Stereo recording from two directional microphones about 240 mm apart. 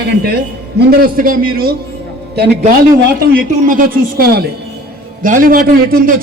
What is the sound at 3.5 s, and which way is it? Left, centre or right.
A man's voice, right.